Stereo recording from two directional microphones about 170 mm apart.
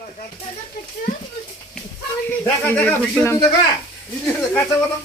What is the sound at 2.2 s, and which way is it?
Speech, 10° left (ahead or behind).